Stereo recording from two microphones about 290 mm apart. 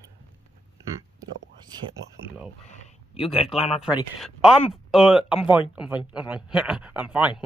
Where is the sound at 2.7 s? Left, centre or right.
Left.